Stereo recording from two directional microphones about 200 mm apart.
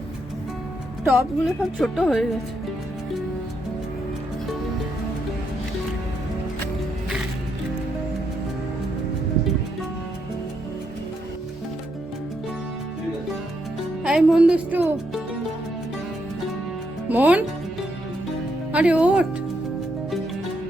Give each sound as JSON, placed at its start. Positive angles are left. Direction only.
{"t": 1.0, "sound": "speech", "side_deg": 0}
{"t": 14.0, "sound": "speech", "side_deg": -5}
{"t": 17.1, "sound": "speech", "side_deg": -10}
{"t": 18.7, "sound": "speech", "side_deg": -5}